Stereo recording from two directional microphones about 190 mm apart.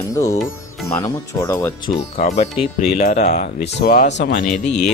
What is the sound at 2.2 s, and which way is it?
Speech, 35° left (ahead or behind).